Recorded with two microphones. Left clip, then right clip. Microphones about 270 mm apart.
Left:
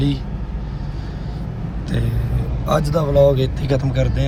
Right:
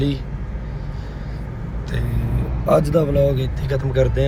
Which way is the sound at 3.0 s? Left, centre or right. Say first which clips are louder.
Right 2 dB; left.